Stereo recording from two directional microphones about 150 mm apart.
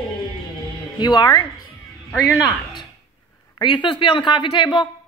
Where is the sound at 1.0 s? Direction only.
30° left (ahead or behind).